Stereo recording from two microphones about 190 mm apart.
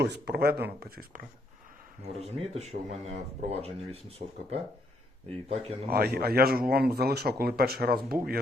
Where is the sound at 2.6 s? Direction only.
35° right (ahead or behind).